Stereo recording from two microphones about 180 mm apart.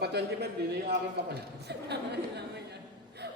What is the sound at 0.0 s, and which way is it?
A man's voice, 65° right (ahead or behind).